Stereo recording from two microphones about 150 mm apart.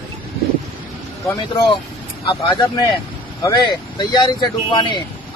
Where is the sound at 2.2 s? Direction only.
25° left (ahead or behind).